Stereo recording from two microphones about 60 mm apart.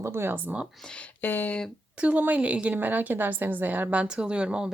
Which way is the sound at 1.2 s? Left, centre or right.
Left.